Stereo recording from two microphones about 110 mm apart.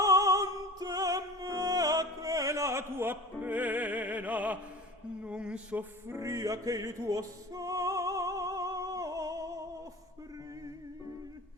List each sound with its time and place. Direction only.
0.0 s music: 30° right (ahead or behind); by 4.5 s 15° right (ahead or behind)
5.2 s a sound: 10° right (ahead or behind)
6.1 s music: 25° right (ahead or behind)